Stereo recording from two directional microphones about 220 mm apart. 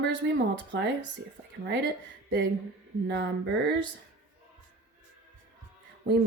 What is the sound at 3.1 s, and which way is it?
Speech, 55° right (ahead or behind).